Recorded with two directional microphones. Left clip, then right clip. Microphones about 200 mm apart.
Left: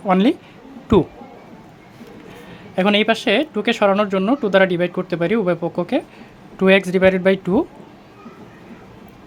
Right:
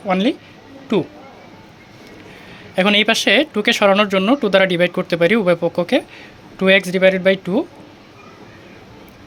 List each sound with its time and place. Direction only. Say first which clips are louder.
0.0 s speech: left 1 dB; 10° left (ahead or behind)
2.7 s speech: right 2 dB; centre (ahead or behind)